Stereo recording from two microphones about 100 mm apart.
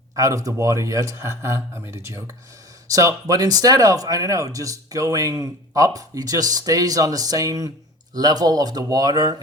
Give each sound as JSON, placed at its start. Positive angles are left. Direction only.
{"t": 0.2, "sound": "speech", "side_deg": -35}